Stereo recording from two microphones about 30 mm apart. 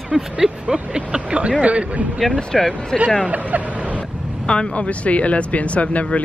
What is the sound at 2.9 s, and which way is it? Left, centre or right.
Speech, centre.